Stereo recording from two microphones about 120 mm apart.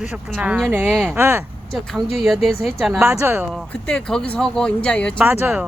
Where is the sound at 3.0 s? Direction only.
20° right (ahead or behind).